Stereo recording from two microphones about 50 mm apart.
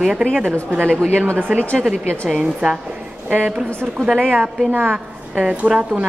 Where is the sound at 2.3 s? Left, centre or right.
Right.